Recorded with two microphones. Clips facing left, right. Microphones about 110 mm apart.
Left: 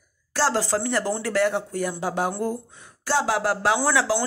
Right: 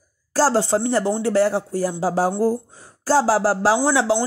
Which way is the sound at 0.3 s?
35° right (ahead or behind).